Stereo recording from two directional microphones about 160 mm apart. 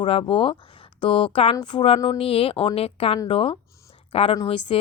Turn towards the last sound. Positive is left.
turn(degrees=35)  # may be behind; listen again after turning